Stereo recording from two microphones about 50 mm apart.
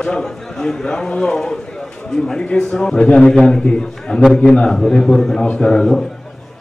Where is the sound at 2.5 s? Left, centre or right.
Centre.